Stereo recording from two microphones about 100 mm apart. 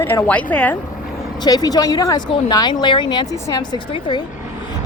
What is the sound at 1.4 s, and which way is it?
Speech, 40° left (ahead or behind).